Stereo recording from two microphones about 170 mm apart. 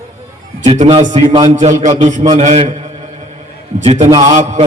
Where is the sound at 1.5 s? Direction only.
45° right (ahead or behind).